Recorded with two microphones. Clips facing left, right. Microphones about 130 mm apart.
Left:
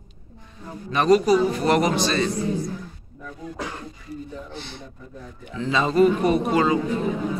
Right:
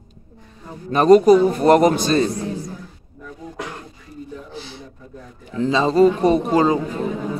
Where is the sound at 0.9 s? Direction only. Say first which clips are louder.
Right 6 dB; 45° right (ahead or behind).